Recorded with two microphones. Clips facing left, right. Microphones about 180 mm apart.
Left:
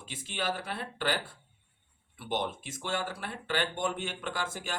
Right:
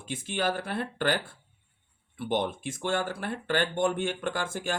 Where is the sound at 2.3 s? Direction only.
50° right (ahead or behind).